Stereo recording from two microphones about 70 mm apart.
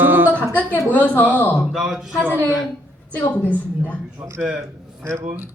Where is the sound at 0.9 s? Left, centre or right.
Left.